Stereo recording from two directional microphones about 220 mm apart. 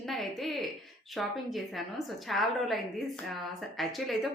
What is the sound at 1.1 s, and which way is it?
Speech, centre (ahead or behind).